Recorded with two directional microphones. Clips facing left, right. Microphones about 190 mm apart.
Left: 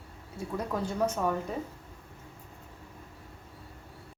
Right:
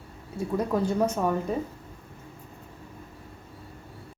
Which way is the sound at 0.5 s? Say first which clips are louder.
Right 6 dB; 25° right (ahead or behind).